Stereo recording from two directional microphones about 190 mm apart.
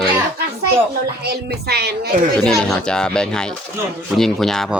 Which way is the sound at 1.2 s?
55° right (ahead or behind).